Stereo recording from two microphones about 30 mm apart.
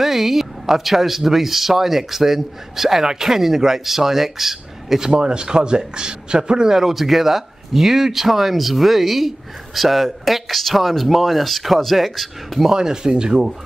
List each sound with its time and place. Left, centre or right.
0.0 s speech: centre
5.1 s a man's voice: right
6.7 s speech: centre
12.7 s a man's voice: right